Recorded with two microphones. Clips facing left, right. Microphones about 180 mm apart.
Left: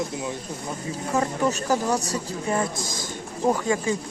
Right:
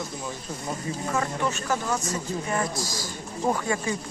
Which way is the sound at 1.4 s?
40° left (ahead or behind).